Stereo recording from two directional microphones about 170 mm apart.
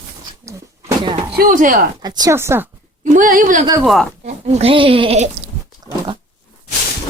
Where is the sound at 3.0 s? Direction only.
50° right (ahead or behind).